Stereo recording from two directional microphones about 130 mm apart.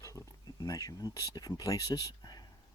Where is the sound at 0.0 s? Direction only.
25° left (ahead or behind).